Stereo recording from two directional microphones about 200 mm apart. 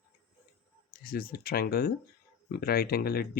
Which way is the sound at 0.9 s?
50° left (ahead or behind).